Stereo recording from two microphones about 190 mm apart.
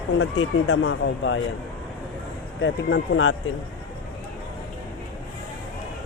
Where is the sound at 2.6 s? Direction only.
80° left.